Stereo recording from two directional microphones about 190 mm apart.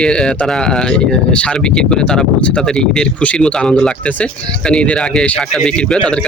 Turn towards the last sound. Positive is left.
turn(degrees=5)  # may be behind; listen again after turning